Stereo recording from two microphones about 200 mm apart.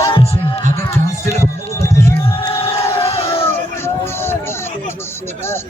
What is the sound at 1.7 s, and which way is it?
Music, 15° left (ahead or behind).